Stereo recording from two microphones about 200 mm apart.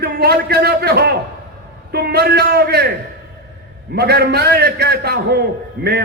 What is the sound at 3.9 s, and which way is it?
A man's voice, 55° right (ahead or behind).